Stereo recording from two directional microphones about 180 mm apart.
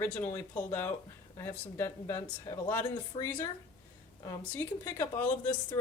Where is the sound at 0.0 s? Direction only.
15° left (ahead or behind).